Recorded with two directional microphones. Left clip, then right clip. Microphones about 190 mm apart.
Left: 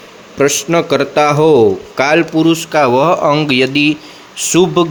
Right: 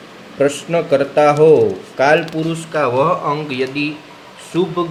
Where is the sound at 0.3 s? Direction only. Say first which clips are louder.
Left 4 dB; 45° left (ahead or behind).